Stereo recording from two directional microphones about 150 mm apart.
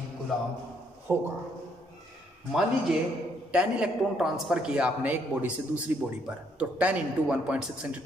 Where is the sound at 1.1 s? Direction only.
15° right (ahead or behind).